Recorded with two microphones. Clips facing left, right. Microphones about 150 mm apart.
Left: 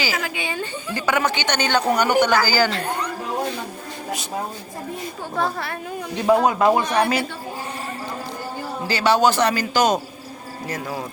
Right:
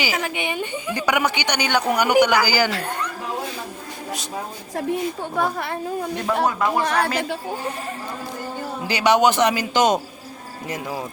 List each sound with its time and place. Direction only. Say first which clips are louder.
0.0 s a woman's voice: right 1 dB; 20° right (ahead or behind)
5.3 s a man's voice: left 2 dB; 15° right (ahead or behind)
6.2 s a man's voice: left 6 dB; 20° left (ahead or behind)
6.8 s a man's voice: left 1 dB; 90° right
8.9 s a man's voice: right 1 dB; 15° right (ahead or behind)